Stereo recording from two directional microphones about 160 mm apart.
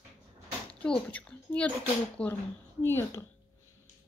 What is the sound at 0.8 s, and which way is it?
Speech, 5° left (ahead or behind).